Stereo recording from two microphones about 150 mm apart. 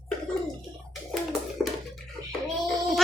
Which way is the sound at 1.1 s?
Centre (ahead or behind).